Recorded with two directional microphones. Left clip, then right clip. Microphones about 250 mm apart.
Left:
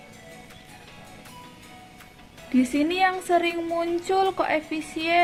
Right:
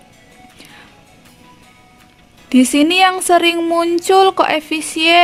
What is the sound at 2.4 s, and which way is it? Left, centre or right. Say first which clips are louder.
Speech: right 11 dB; right.